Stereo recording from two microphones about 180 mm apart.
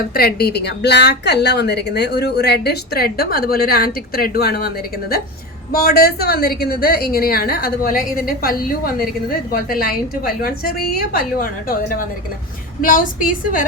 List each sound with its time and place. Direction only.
0.0 s a woman's voice: 55° left (ahead or behind)
5.7 s a woman's voice: 60° left (ahead or behind)
12.8 s a woman's voice: 50° left (ahead or behind)